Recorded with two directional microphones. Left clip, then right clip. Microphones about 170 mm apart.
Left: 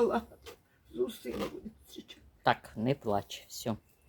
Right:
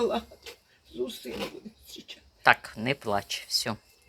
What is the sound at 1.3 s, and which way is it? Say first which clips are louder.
Speech: right 1 dB; 10° left (ahead or behind).